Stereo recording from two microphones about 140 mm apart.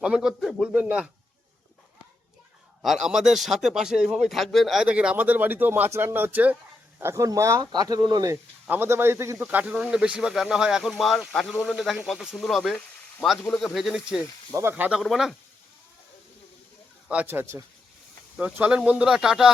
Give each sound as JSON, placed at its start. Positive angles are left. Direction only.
{"t": 0.0, "sound": "a man's voice", "side_deg": -5}
{"t": 2.8, "sound": "speech", "side_deg": 0}
{"t": 8.6, "sound": "speech", "side_deg": -15}
{"t": 14.5, "sound": "a man's voice", "side_deg": -15}
{"t": 15.0, "sound": "speech", "side_deg": 0}
{"t": 17.1, "sound": "a man's voice", "side_deg": -10}